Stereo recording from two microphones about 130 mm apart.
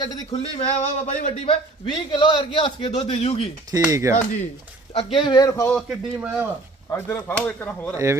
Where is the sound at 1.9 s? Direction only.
35° left (ahead or behind).